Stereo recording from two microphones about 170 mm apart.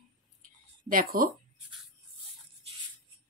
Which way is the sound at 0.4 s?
55° right (ahead or behind).